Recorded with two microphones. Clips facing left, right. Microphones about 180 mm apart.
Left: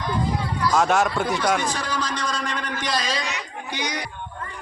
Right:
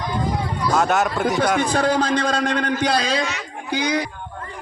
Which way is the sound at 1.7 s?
55° right (ahead or behind).